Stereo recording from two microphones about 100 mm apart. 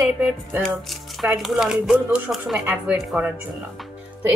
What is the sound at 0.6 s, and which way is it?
A woman's voice, centre (ahead or behind).